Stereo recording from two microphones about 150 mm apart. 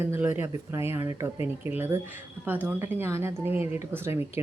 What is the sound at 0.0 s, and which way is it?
A woman's voice, 15° right (ahead or behind).